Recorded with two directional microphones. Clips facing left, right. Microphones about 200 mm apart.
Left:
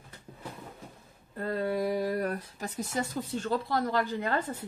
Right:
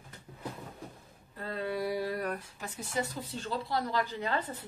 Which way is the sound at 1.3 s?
45° left (ahead or behind).